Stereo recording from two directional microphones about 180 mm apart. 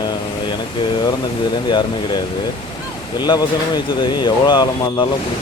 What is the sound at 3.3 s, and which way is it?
Speech, 30° left (ahead or behind).